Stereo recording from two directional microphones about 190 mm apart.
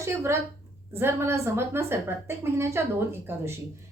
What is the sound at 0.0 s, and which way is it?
A woman's voice, 15° right (ahead or behind).